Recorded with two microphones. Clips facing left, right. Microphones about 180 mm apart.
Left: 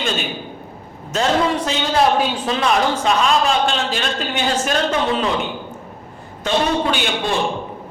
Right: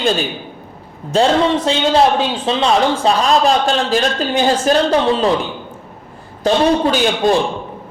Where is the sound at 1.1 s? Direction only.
30° right (ahead or behind).